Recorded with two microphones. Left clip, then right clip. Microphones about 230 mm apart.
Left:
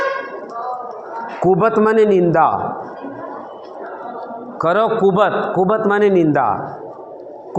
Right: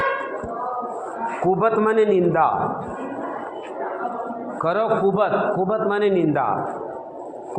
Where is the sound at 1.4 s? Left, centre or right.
Left.